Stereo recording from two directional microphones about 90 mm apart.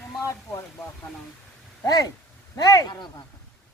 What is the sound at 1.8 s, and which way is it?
Speech, 45° left (ahead or behind).